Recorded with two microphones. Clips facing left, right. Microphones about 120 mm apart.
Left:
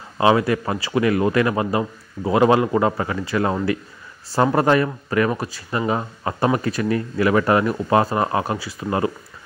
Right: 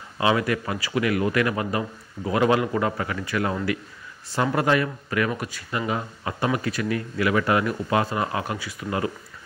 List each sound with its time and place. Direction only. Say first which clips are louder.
0.2 s a man's voice: left 5 dB; 30° left (ahead or behind)